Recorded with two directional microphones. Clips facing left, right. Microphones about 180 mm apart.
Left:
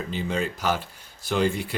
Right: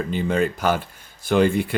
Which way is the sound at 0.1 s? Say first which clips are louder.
Right 6 dB; 55° right (ahead or behind).